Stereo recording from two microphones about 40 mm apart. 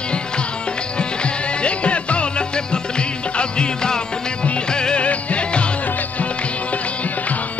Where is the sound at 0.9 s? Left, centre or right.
Left.